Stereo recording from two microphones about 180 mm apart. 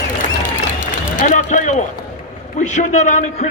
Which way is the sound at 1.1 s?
45° left (ahead or behind).